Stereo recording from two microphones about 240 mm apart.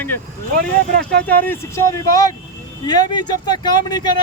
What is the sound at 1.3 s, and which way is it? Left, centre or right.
Speech, centre.